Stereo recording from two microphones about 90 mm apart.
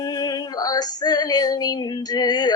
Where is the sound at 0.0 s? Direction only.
45° left (ahead or behind).